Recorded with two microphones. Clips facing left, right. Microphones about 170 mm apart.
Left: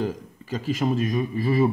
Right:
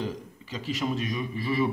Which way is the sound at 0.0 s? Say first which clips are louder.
Left 5 dB; 50° left (ahead or behind).